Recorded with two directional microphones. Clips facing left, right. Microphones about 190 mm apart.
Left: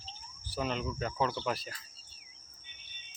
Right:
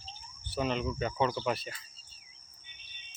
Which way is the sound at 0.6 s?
Centre (ahead or behind).